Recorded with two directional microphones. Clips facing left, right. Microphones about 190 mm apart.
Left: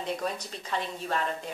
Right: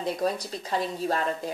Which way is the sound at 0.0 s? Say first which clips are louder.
Right 5 dB; 35° right (ahead or behind).